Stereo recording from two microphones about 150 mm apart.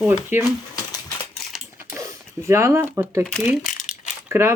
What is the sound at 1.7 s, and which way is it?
Typing, 20° right (ahead or behind).